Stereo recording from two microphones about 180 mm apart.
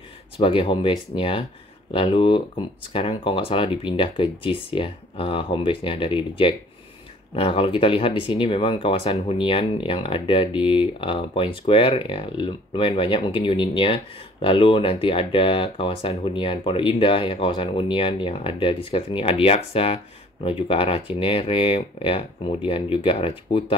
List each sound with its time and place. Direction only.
0.4 s speech: 30° left (ahead or behind)